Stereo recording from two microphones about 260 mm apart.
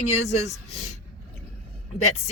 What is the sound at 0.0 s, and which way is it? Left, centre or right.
Speech, left.